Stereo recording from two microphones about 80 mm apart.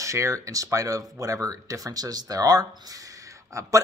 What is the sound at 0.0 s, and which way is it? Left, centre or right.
Speech, right.